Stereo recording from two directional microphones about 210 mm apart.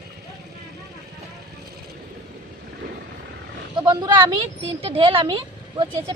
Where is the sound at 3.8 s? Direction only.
20° right (ahead or behind).